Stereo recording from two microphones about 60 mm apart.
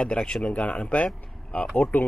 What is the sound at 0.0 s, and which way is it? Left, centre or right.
A man's voice, centre.